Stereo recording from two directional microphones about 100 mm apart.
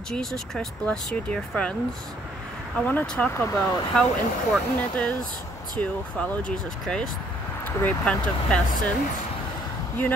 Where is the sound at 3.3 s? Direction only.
30° left (ahead or behind).